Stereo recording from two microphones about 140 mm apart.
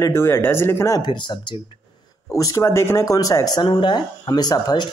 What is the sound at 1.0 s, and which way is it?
Speech, 30° left (ahead or behind).